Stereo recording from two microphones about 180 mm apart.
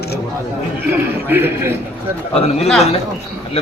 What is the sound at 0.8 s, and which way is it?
Speech, 10° right (ahead or behind).